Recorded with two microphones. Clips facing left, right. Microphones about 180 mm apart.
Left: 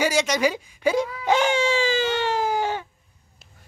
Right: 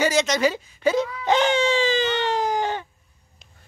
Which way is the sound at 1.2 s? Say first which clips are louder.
Right 1 dB; 10° left (ahead or behind).